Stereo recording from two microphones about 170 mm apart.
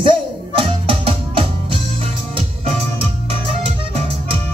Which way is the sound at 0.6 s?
30° right (ahead or behind).